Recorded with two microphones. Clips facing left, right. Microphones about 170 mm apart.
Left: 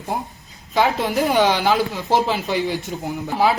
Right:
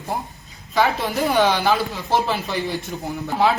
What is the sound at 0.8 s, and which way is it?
A woman's voice, 15° left (ahead or behind).